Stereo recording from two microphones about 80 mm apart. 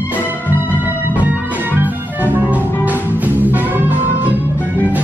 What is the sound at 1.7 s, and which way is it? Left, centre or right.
Music, right.